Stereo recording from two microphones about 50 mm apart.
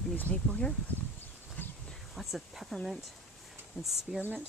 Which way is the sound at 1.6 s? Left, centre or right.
Left.